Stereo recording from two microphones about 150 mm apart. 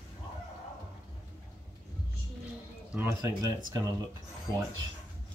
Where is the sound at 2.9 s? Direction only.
15° right (ahead or behind).